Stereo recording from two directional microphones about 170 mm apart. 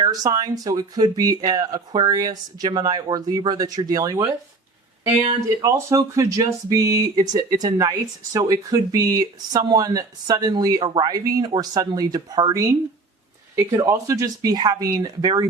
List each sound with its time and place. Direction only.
0.0 s speech: 20° right (ahead or behind)
13.7 s speech: 15° right (ahead or behind)